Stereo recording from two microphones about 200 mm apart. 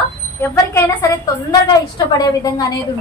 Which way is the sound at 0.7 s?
20° left (ahead or behind).